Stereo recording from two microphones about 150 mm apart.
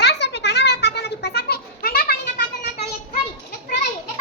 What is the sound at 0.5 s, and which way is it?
Cat, 90° left.